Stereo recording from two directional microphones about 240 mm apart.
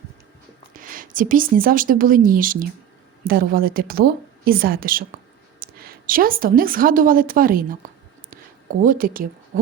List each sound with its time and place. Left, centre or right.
0.7 s a woman's voice: right
8.8 s a woman's voice: right